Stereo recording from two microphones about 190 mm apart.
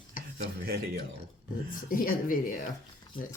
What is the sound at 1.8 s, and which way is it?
Speech, 45° left (ahead or behind).